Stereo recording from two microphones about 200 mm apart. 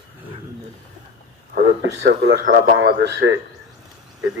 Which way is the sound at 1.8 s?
60° right (ahead or behind).